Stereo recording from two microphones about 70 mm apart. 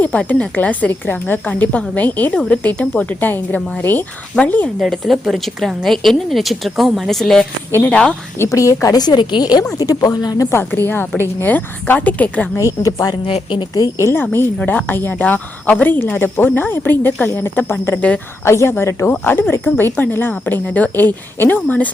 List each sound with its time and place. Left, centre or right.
0.0 s speech: left
4.8 s a woman's voice: centre
8.4 s a woman's voice: left
9.7 s speech: left
10.4 s speech: left
12.5 s speech: left
14.6 s speech: left